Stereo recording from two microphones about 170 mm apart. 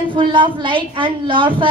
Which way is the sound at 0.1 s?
30° right (ahead or behind).